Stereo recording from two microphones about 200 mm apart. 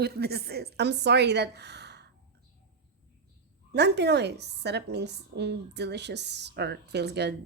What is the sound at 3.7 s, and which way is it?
A woman's voice, 55° right (ahead or behind).